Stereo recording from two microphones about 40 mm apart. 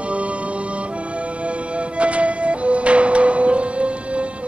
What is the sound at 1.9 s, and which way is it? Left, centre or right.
Music, right.